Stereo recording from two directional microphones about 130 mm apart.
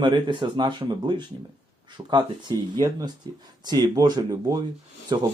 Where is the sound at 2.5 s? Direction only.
30° right (ahead or behind).